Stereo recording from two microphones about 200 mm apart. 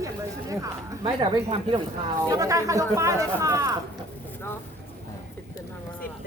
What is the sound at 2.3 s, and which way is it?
A man's voice, 15° right (ahead or behind).